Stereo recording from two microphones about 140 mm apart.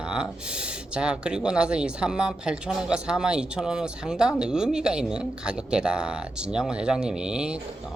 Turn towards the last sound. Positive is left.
turn(degrees=-5)  # may be behind; listen again after turning